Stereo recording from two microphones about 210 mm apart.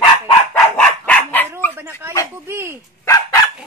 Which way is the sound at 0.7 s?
5° left (ahead or behind).